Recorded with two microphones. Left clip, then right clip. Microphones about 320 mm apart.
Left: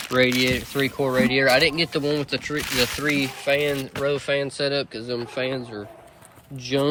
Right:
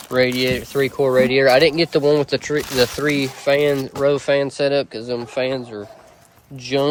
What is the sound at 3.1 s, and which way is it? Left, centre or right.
Speech, right.